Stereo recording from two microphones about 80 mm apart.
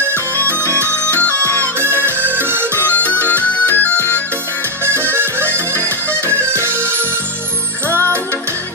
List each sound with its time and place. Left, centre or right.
0.7 s music: right
1.3 s music: centre
1.8 s music: right
2.7 s music: left
5.1 s music: right